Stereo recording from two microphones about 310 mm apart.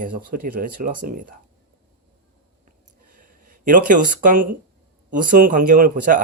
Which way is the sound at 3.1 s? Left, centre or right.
Right.